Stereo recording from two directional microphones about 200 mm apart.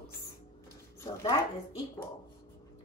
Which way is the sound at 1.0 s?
15° left (ahead or behind).